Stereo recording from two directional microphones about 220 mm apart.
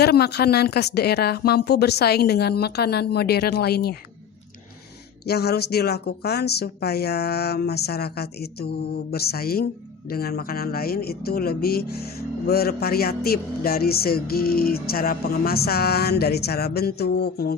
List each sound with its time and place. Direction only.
0.0 s speech: 45° left (ahead or behind)
5.2 s speech: 45° left (ahead or behind)